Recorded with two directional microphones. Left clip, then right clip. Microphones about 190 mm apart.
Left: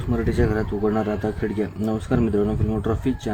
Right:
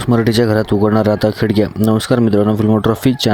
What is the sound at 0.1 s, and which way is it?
Speech, 45° right (ahead or behind).